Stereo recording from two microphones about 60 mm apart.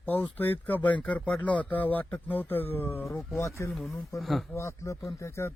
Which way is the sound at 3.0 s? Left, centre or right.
Left.